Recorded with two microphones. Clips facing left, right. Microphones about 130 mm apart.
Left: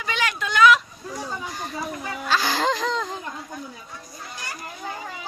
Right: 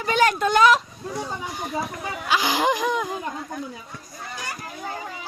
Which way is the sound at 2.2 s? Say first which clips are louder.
Right 1 dB; 15° right (ahead or behind).